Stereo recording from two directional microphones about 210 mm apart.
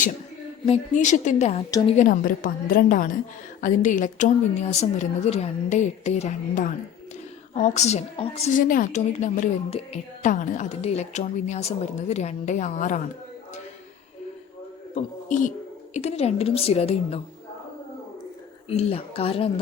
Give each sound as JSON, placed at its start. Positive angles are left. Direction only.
{"t": 0.6, "sound": "a woman's voice", "side_deg": 30}
{"t": 14.9, "sound": "a woman's voice", "side_deg": 35}
{"t": 18.7, "sound": "a woman's voice", "side_deg": 30}